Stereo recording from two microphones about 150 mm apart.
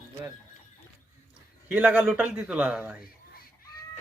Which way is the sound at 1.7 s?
10° right (ahead or behind).